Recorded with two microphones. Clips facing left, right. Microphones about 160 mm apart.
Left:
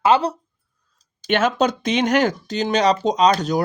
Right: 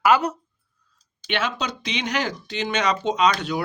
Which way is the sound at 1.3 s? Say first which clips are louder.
Left 8 dB; 45° left (ahead or behind).